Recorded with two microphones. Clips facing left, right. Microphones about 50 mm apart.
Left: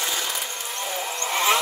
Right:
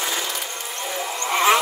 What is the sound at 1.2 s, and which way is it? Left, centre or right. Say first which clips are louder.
Vehicle: right 4 dB; right.